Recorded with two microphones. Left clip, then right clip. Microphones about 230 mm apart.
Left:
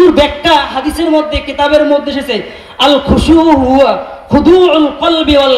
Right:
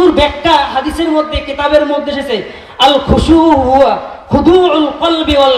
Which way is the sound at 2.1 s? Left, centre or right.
Left.